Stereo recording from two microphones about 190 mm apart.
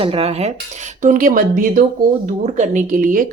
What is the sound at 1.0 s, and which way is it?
Speech, 45° right (ahead or behind).